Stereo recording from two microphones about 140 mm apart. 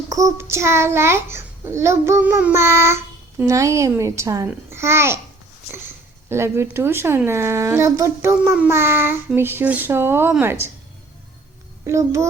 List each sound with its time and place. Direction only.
0.1 s a child's voice: 20° right (ahead or behind)
6.2 s child singing: 20° right (ahead or behind)
11.9 s a child's voice: 20° right (ahead or behind)